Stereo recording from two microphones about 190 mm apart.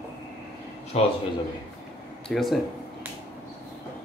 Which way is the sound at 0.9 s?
35° left (ahead or behind).